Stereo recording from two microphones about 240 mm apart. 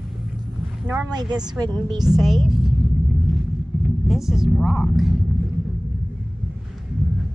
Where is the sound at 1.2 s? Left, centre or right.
Centre.